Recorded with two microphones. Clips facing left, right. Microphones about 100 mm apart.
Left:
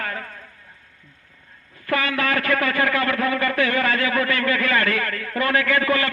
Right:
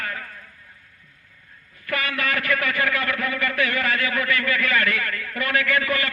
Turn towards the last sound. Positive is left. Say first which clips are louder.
# left 3 dB
turn(degrees=30)  # may be behind; listen again after turning